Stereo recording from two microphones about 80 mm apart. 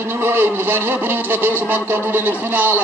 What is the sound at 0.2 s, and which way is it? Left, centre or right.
A man's voice, right.